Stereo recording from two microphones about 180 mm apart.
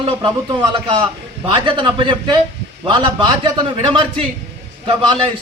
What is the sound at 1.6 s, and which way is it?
Speech, 25° right (ahead or behind).